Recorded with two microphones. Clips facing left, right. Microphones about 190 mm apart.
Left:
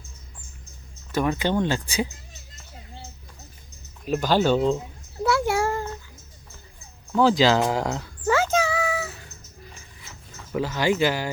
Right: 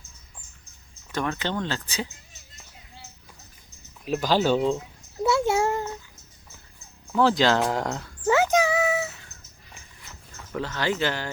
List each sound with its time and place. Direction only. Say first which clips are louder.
1.1 s speech: left 5 dB; 10° left (ahead or behind)
4.0 s speech: left 2 dB; centre (ahead or behind)
5.2 s a child's voice: even; 25° right (ahead or behind)
7.1 s speech: left 2 dB; centre (ahead or behind)
8.3 s a sound: right 1 dB; 15° right (ahead or behind)
10.0 s a sound: even; 5° left (ahead or behind)